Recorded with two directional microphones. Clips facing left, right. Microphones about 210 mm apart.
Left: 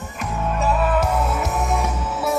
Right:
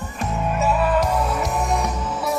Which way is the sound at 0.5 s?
Centre (ahead or behind).